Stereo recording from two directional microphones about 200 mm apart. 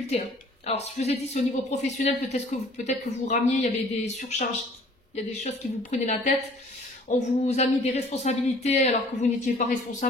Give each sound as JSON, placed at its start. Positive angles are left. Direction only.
{"t": 0.7, "sound": "speech", "side_deg": 30}